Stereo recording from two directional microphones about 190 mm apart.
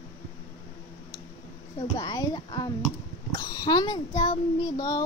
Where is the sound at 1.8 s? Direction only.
20° left (ahead or behind).